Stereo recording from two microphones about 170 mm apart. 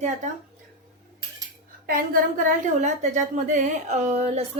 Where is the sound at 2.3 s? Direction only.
45° right (ahead or behind).